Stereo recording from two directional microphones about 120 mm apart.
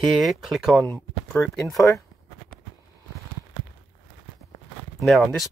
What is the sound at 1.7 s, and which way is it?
Speech, 30° left (ahead or behind).